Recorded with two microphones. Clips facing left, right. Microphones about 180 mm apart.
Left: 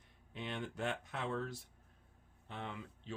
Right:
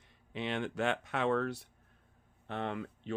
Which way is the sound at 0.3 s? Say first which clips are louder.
Right 7 dB; 85° right.